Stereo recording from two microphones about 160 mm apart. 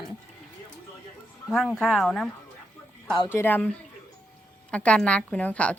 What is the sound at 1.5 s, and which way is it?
Speech, 5° left (ahead or behind).